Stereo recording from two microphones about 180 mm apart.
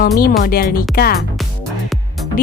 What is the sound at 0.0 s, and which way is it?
Speech, 55° left (ahead or behind).